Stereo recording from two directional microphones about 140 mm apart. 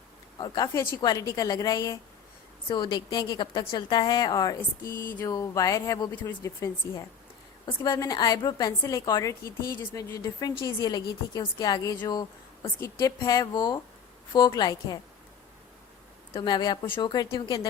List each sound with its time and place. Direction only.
0.3 s a woman's voice: 30° left (ahead or behind)
16.3 s a woman's voice: 35° left (ahead or behind)